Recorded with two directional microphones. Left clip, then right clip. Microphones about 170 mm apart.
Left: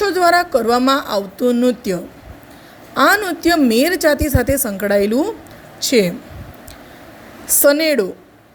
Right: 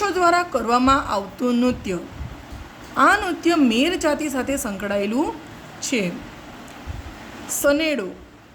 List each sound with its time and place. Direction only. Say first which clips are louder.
0.0 s a woman's voice: left 5 dB; 20° left (ahead or behind)
7.4 s a woman's voice: left 6 dB; 25° left (ahead or behind)